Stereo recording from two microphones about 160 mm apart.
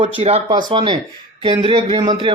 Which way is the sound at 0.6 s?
30° right (ahead or behind).